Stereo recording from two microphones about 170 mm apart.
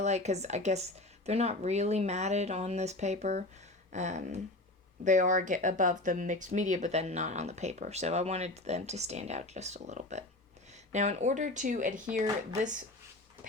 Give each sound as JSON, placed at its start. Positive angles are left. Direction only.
{"t": 0.0, "sound": "speech", "side_deg": -40}